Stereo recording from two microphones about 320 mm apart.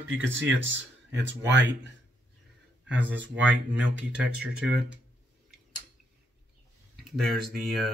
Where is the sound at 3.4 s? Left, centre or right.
Centre.